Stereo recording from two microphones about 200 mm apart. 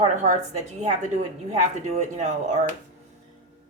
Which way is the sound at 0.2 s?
35° right (ahead or behind).